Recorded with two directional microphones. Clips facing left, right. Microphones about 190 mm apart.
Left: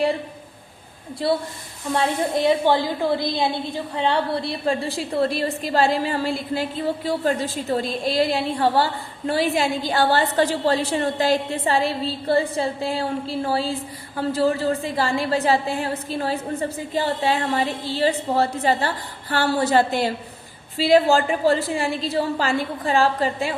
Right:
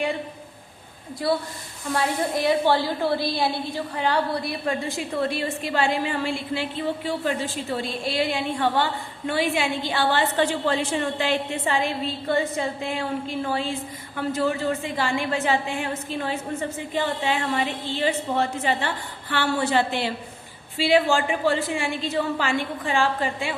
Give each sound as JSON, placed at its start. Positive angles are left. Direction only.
{"t": 1.2, "sound": "a woman's voice", "side_deg": 25}